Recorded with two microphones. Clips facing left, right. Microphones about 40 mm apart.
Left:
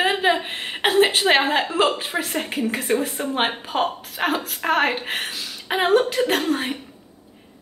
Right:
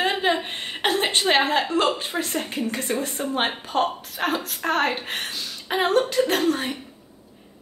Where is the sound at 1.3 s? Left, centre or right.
Centre.